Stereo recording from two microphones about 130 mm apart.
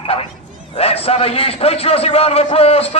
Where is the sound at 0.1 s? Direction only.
50° left (ahead or behind).